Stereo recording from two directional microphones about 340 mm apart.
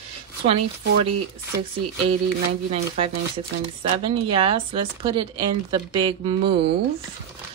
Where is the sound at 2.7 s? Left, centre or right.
Centre.